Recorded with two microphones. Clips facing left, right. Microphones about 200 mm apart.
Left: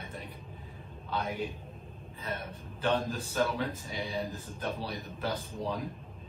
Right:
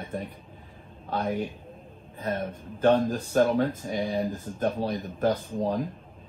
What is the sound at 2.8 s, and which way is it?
Speech, 50° right (ahead or behind).